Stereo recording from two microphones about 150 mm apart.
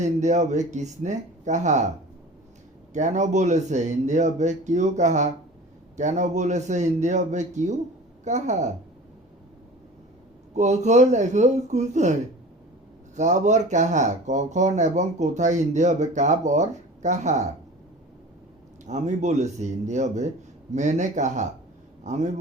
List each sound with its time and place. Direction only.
0.0 s speech: 50° right (ahead or behind)
2.9 s speech: 50° right (ahead or behind)
10.5 s speech: 50° right (ahead or behind)
13.1 s speech: 55° right (ahead or behind)
18.9 s a man's voice: 50° right (ahead or behind)